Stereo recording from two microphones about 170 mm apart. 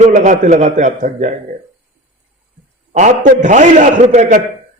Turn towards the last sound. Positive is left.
turn(degrees=-45)  # may be behind; listen again after turning